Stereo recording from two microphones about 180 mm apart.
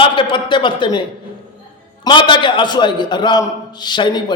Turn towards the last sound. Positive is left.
turn(degrees=25)  # may be behind; listen again after turning